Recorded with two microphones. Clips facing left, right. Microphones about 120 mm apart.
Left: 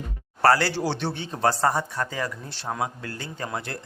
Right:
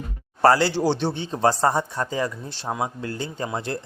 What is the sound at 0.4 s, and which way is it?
Speech, 20° right (ahead or behind).